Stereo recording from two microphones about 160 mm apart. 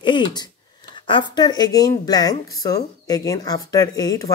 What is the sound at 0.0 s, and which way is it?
A woman's voice, 30° left (ahead or behind).